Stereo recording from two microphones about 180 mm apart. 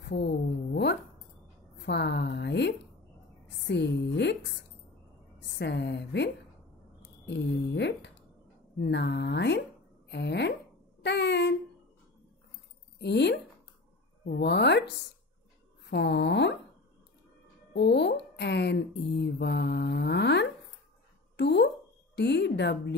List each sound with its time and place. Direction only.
0.0 s speech: 70° left (ahead or behind)
1.8 s speech: 70° left (ahead or behind)
5.6 s a woman's voice: 70° left (ahead or behind)
11.0 s a sound: 70° left (ahead or behind)
13.0 s speech: 70° left (ahead or behind)
17.7 s speech: 70° left (ahead or behind)